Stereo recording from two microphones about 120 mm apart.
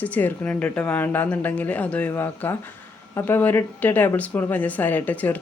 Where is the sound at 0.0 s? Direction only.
15° left (ahead or behind).